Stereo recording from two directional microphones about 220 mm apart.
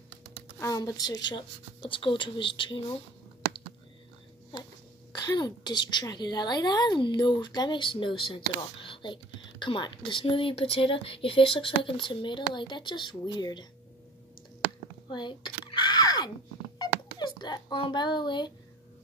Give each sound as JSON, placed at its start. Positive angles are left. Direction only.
{"t": 0.6, "sound": "a woman's voice", "side_deg": 15}
{"t": 5.1, "sound": "a woman's voice", "side_deg": 15}
{"t": 15.0, "sound": "a sound", "side_deg": 20}
{"t": 17.4, "sound": "a child's voice", "side_deg": 20}